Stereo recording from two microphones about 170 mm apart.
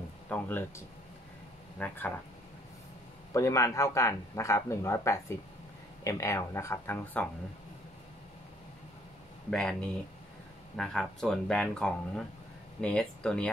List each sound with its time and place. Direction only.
0.3 s speech: 10° left (ahead or behind)
3.3 s speech: 20° left (ahead or behind)
9.5 s speech: 5° left (ahead or behind)